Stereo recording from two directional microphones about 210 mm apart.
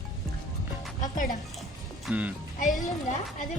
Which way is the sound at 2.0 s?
5° right (ahead or behind).